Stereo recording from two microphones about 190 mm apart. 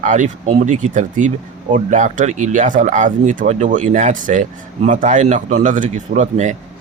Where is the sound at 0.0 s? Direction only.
40° right (ahead or behind).